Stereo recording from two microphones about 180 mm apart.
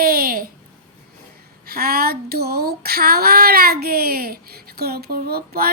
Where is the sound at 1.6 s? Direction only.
60° right (ahead or behind).